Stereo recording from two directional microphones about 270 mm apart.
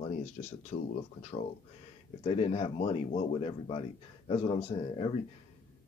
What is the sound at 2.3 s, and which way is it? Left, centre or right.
Speech, left.